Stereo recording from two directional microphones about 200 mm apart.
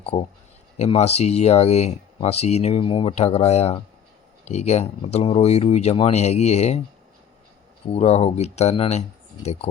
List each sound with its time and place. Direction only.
0.0 s speech: 30° left (ahead or behind)
7.9 s speech: 30° left (ahead or behind)